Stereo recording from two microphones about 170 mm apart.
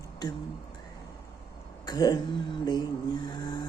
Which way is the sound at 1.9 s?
25° left (ahead or behind).